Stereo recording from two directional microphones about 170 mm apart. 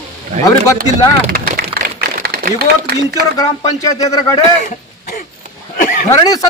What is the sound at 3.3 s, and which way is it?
Speech, 20° left (ahead or behind).